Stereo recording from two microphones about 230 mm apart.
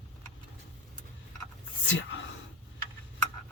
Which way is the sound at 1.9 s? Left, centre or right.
Left.